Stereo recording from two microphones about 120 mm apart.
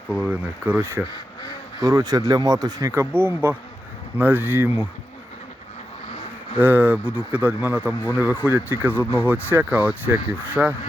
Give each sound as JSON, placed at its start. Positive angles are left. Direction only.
{"t": 0.1, "sound": "speech", "side_deg": -10}
{"t": 6.6, "sound": "speech", "side_deg": -15}